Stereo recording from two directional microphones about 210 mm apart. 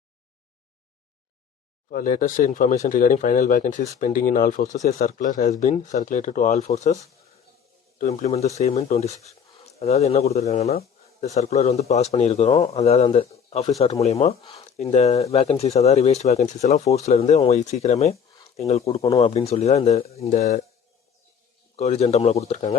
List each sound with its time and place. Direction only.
1.9 s speech: 40° left (ahead or behind)
21.8 s speech: 30° left (ahead or behind)